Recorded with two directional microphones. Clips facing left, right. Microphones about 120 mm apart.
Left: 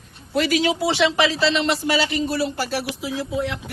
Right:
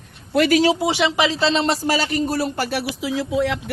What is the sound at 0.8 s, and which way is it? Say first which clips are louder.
Speech: even; 15° right (ahead or behind).